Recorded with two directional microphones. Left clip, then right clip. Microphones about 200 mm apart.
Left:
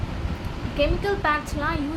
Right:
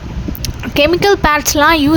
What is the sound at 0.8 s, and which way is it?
Speech, 50° right (ahead or behind).